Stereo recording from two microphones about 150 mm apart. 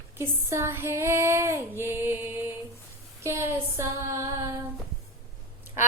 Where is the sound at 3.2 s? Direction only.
20° right (ahead or behind).